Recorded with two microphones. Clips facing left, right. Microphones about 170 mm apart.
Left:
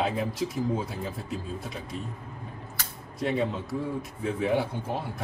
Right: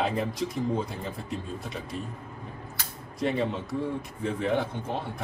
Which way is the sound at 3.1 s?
Centre (ahead or behind).